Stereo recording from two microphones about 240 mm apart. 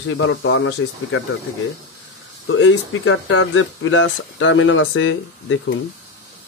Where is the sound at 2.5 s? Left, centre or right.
Left.